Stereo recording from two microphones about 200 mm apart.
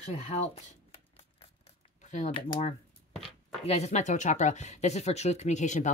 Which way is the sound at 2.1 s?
35° left (ahead or behind).